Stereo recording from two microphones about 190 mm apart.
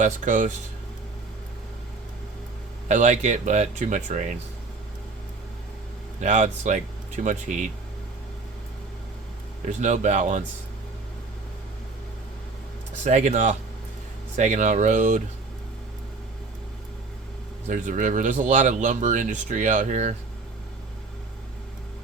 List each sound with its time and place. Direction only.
0.0 s speech: 40° right (ahead or behind)
2.9 s speech: 40° right (ahead or behind)
6.1 s speech: 40° right (ahead or behind)
9.8 s speech: 40° right (ahead or behind)
13.1 s speech: 40° right (ahead or behind)
17.7 s speech: 40° right (ahead or behind)